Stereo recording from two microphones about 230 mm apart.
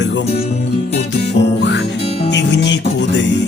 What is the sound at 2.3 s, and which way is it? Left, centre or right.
Music, left.